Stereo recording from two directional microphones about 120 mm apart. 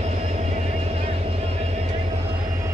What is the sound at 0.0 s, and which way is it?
Vehicle, 70° right (ahead or behind).